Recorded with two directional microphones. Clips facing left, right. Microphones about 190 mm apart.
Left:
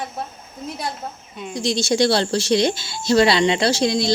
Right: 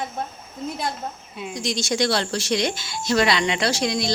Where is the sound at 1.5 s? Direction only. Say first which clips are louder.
Left 5 dB; 30° left (ahead or behind).